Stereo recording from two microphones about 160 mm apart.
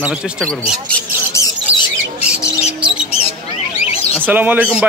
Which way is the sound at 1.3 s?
20° left (ahead or behind).